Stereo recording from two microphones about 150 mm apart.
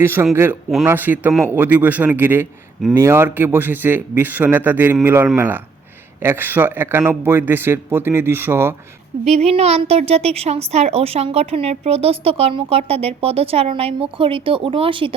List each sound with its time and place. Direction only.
0.0 s speech: 15° right (ahead or behind)
9.2 s a woman's voice: 45° right (ahead or behind)